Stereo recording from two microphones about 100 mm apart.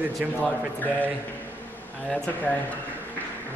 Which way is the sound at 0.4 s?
15° left (ahead or behind).